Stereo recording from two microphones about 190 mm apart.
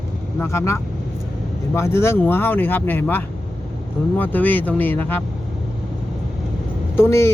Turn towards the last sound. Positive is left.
turn(degrees=15)  # may be behind; listen again after turning